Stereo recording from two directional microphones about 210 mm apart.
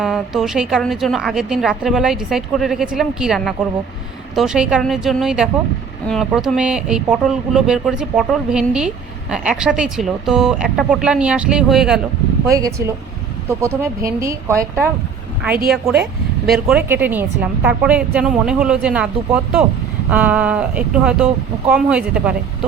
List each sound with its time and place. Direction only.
0.0 s a woman's voice: centre (ahead or behind)
12.5 s speech: 15° right (ahead or behind)
15.7 s a woman's voice: centre (ahead or behind)